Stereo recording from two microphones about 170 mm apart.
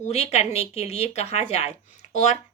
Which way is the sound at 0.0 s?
40° left (ahead or behind).